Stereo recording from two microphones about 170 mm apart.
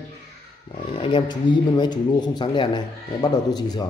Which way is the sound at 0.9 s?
30° left (ahead or behind).